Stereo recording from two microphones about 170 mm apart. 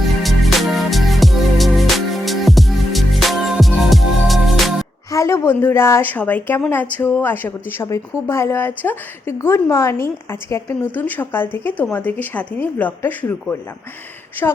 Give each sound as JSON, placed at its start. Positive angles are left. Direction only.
{"t": 0.2, "sound": "music", "side_deg": 0}
{"t": 5.1, "sound": "a woman's voice", "side_deg": 20}